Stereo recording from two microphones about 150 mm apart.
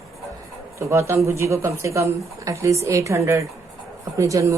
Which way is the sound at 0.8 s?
20° right (ahead or behind).